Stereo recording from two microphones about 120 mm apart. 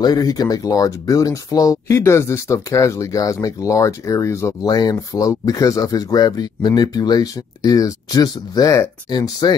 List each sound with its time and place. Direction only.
0.0 s speech: 30° left (ahead or behind)